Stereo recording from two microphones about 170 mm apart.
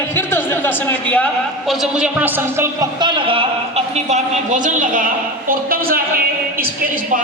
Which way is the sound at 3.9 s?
45° right (ahead or behind).